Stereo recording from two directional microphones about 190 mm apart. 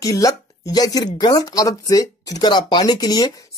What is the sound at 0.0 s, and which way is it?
Speech, 15° left (ahead or behind).